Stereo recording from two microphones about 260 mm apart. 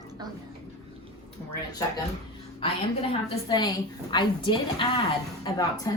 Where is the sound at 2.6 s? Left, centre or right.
Centre.